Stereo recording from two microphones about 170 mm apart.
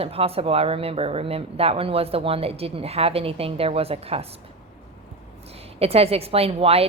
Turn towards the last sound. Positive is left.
turn(degrees=-35)  # may be behind; listen again after turning